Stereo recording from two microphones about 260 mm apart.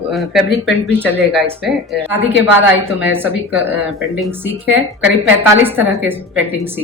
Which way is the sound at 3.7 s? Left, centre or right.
Centre.